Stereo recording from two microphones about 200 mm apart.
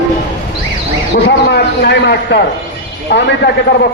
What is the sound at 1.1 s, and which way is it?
A man's voice, 55° left (ahead or behind).